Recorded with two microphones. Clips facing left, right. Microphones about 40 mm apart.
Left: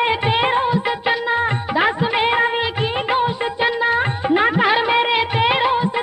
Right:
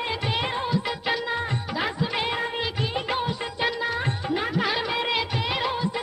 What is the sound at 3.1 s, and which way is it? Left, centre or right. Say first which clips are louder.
Music: left 9 dB; left.